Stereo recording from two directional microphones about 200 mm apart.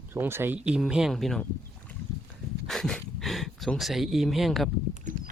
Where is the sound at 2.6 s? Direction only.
Centre (ahead or behind).